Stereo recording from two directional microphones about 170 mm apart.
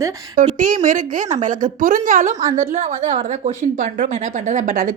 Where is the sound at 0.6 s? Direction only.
50° right (ahead or behind).